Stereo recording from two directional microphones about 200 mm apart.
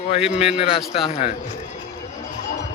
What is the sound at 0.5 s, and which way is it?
Speech, 30° left (ahead or behind).